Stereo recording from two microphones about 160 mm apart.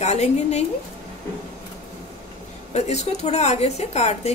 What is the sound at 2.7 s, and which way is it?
A woman's voice, 45° left (ahead or behind).